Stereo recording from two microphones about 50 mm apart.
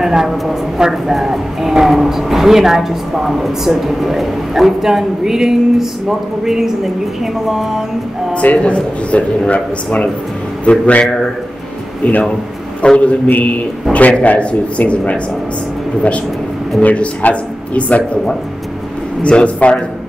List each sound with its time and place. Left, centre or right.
0.0 s speech: centre
8.4 s speech: left
10.6 s a man's voice: left
16.8 s speech: left
19.2 s speech: left